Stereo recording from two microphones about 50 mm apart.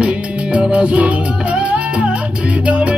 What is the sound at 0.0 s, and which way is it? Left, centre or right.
Music, right.